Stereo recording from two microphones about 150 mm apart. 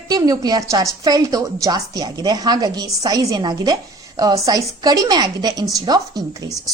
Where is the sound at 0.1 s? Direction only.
25° right (ahead or behind).